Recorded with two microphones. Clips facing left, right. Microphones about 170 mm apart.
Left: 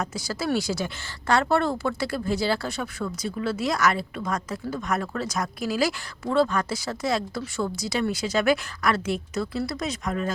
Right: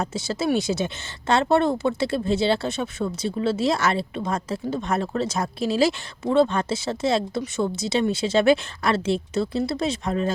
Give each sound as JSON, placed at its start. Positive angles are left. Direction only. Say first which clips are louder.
{"t": 0.0, "sound": "speech", "louder": "right 4 dB", "side_deg": -25}